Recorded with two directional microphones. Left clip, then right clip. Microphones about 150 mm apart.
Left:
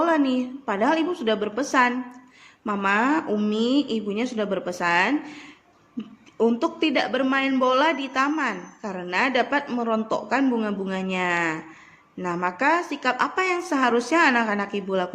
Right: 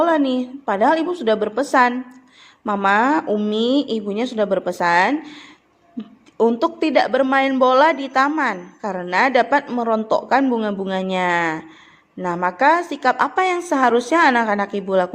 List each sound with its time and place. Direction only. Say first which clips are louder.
0.0 s a woman's voice: right 4 dB; 25° right (ahead or behind)